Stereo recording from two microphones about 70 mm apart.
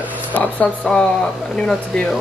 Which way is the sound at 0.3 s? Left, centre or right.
Left.